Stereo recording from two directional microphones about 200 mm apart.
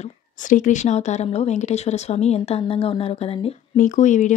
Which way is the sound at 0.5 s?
40° left (ahead or behind).